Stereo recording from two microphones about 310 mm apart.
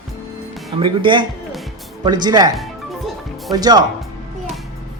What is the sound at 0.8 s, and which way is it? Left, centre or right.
Speech, centre.